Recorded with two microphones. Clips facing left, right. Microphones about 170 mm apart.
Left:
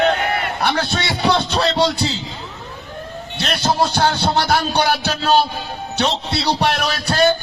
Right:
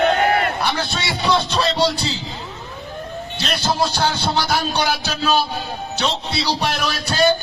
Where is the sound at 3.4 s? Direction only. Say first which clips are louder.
Left 2 dB; 65° left (ahead or behind).